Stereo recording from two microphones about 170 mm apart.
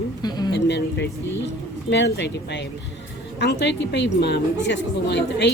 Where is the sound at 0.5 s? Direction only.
90° left.